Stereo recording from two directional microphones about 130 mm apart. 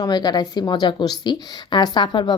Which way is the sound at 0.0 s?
35° left (ahead or behind).